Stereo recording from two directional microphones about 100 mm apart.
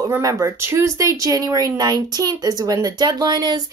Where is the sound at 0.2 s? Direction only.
30° right (ahead or behind).